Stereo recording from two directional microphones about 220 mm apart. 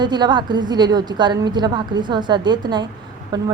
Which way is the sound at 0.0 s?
20° right (ahead or behind).